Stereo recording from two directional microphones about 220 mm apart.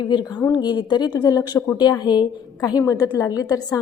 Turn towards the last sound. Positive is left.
turn(degrees=15)  # may be behind; listen again after turning